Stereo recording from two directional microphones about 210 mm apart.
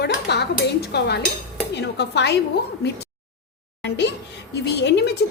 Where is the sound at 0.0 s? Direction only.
50° left (ahead or behind).